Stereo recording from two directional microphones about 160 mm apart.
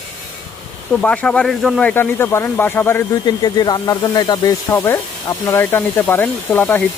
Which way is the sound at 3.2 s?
25° left (ahead or behind).